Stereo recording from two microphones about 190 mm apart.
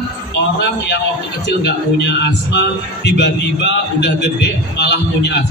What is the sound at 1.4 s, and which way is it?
A man's voice, 65° left (ahead or behind).